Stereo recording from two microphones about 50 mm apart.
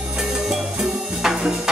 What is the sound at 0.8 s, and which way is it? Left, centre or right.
Music, centre.